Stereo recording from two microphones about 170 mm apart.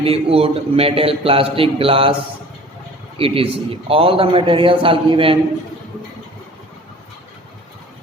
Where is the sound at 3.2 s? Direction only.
35° right (ahead or behind).